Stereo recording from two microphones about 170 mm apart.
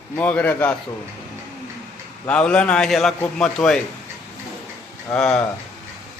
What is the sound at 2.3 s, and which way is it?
A man's voice, 5° left (ahead or behind).